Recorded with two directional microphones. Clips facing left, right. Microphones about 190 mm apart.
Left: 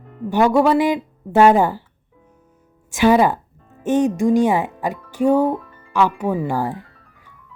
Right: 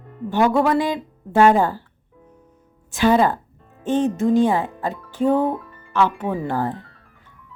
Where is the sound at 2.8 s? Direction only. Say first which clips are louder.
Left 2 dB; 15° left (ahead or behind).